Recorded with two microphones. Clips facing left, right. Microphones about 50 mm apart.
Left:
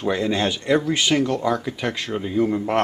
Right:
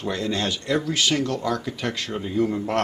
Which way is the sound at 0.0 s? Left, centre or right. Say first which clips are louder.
Left 4 dB; centre.